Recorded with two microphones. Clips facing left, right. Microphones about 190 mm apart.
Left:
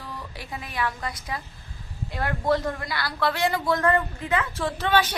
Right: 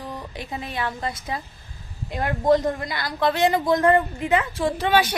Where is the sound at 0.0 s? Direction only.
20° right (ahead or behind).